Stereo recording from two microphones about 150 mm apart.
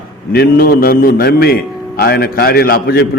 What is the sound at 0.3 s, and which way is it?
A man's voice, 85° left.